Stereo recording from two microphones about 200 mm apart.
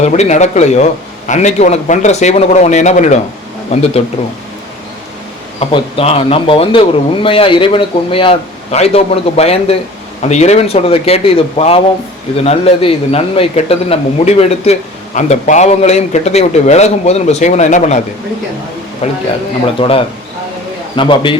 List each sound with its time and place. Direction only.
0.0 s a man's voice: 35° left (ahead or behind)
5.5 s a man's voice: 30° left (ahead or behind)
19.0 s a man's voice: 35° left (ahead or behind)